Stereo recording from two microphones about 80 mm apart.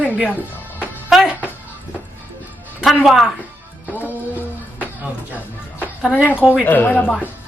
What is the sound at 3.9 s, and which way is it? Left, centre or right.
Music, right.